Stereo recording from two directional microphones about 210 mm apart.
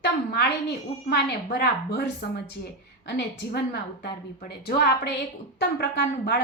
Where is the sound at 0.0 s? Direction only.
50° left (ahead or behind).